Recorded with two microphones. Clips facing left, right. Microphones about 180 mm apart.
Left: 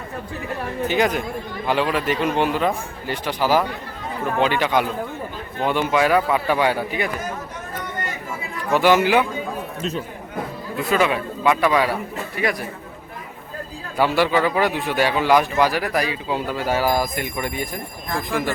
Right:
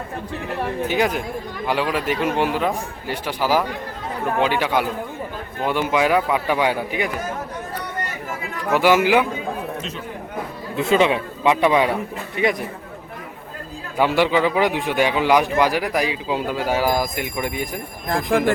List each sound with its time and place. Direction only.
0.9 s a man's voice: 5° right (ahead or behind)
8.7 s a man's voice: 10° right (ahead or behind)
10.8 s a man's voice: 25° right (ahead or behind)
14.0 s a man's voice: 15° right (ahead or behind)
18.1 s speech: 55° right (ahead or behind)